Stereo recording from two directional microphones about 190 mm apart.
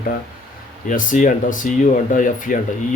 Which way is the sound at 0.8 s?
45° left (ahead or behind).